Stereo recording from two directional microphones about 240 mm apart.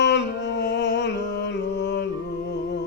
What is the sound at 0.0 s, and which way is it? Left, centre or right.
Music, left.